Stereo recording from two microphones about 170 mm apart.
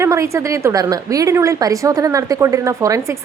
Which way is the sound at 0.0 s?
15° right (ahead or behind).